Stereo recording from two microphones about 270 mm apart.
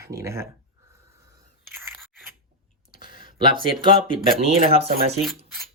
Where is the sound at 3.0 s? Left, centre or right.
Left.